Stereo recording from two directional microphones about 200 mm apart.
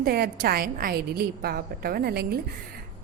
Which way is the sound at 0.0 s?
50° right (ahead or behind).